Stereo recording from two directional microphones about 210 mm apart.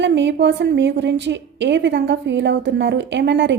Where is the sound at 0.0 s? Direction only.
55° right (ahead or behind).